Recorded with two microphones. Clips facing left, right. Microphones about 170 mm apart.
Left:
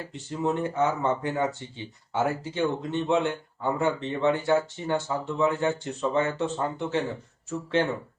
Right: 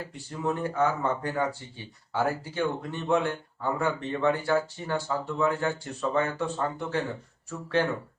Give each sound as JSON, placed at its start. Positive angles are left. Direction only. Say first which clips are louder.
{"t": 0.1, "sound": "speech", "louder": "left 4 dB", "side_deg": 20}